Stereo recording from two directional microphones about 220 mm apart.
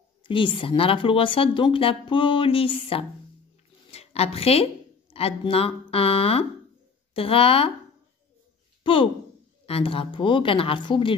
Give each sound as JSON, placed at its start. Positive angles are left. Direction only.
{"t": 0.2, "sound": "a woman's voice", "side_deg": 25}
{"t": 8.8, "sound": "speech", "side_deg": 25}